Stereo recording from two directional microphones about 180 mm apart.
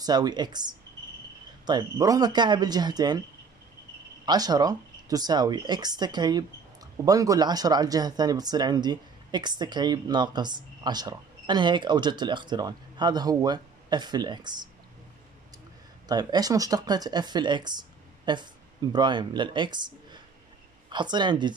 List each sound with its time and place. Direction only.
0.0 s speech: 20° right (ahead or behind)
4.3 s speech: 20° right (ahead or behind)
16.1 s speech: 20° right (ahead or behind)